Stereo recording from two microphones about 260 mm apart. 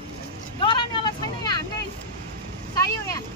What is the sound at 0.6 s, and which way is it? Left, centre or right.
Vehicle, centre.